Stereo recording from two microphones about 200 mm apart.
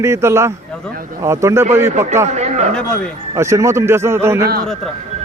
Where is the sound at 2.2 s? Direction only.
35° right (ahead or behind).